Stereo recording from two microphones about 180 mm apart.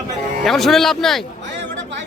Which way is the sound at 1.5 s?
85° right.